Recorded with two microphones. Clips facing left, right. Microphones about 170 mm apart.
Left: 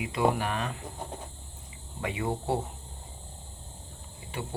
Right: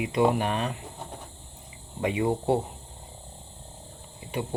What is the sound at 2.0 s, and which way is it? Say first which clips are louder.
Speech: right 6 dB; 20° right (ahead or behind).